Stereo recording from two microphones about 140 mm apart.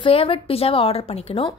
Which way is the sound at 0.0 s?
40° left (ahead or behind).